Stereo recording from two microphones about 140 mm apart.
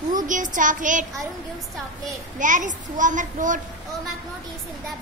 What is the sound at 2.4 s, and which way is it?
A child's voice, 65° right (ahead or behind).